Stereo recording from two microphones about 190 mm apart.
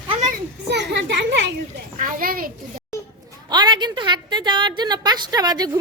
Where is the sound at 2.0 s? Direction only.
50° right (ahead or behind).